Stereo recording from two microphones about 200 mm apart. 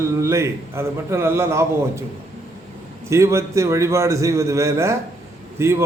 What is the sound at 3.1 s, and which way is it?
A man's voice, 15° right (ahead or behind).